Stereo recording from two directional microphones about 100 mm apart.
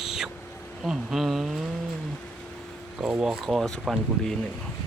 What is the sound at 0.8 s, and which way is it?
Insect, 5° right (ahead or behind).